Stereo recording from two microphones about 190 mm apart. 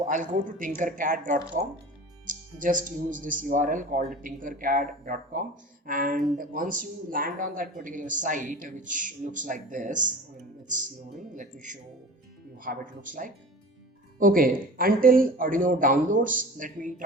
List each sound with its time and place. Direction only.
0.0 s a man's voice: 45° right (ahead or behind)
11.2 s a man's voice: 40° right (ahead or behind)